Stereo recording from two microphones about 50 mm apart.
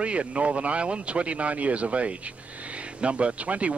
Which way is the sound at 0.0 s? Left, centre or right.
Right.